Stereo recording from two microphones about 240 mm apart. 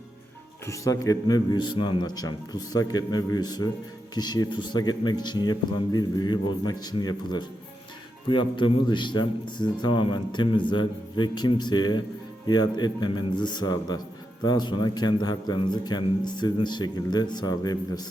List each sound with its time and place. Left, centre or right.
0.6 s a man's voice: centre